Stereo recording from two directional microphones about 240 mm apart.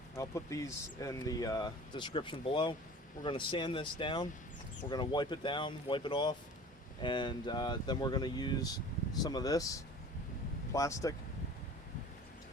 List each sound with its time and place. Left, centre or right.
0.2 s speech: centre